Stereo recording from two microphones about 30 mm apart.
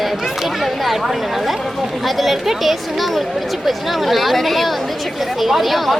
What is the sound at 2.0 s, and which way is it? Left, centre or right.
Speech, centre.